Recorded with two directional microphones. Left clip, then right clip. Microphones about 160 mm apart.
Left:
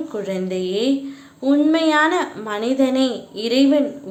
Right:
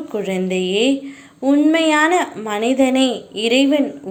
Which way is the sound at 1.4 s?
10° right (ahead or behind).